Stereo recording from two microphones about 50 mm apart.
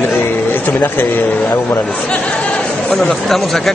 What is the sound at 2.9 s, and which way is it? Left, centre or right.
Speech, centre.